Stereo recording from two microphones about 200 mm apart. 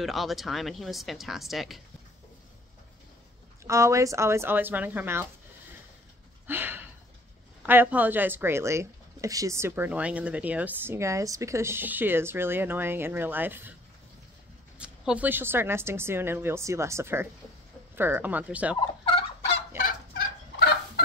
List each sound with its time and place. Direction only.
0.0 s speech: centre (ahead or behind)
3.6 s speech: 15° right (ahead or behind)
6.4 s a sound: 10° right (ahead or behind)
7.6 s speech: 10° right (ahead or behind)
14.8 s speech: 5° right (ahead or behind)
18.8 s fowl: 25° left (ahead or behind)
20.5 s fowl: 55° left (ahead or behind)